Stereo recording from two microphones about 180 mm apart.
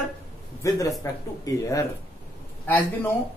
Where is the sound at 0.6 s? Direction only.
15° left (ahead or behind).